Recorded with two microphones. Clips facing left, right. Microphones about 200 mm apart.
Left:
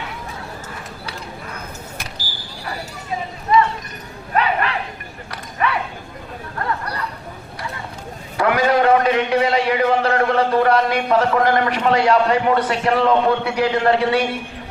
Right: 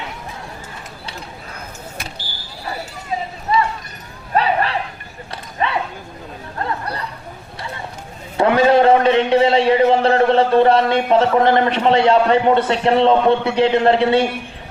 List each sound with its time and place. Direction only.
4.4 s bow-wow: 35° right (ahead or behind)
5.3 s a sound: 25° right (ahead or behind)
8.4 s a man's voice: 25° right (ahead or behind)